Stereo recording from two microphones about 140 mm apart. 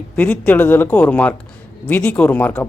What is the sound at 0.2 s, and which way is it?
Speech, 10° left (ahead or behind).